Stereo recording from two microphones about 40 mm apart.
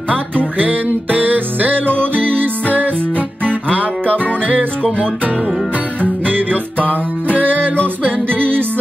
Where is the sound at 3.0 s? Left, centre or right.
Left.